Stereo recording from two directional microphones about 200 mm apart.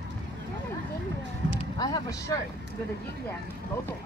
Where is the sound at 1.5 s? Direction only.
20° left (ahead or behind).